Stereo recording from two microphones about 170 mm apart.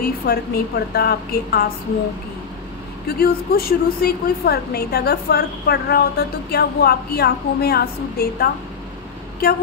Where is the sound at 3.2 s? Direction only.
60° left (ahead or behind).